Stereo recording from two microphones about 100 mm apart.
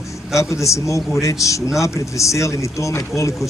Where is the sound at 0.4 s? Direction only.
30° left (ahead or behind).